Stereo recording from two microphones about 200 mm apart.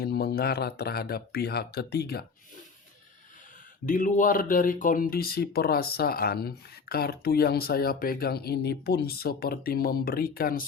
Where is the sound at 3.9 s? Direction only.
40° left (ahead or behind).